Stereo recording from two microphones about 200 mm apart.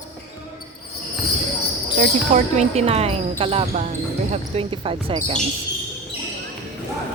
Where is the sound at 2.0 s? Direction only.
35° right (ahead or behind).